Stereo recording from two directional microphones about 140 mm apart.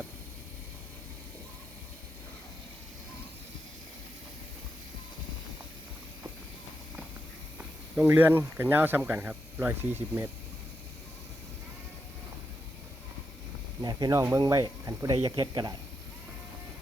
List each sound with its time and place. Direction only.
7.6 s speech: 10° right (ahead or behind)
13.8 s speech: 25° right (ahead or behind)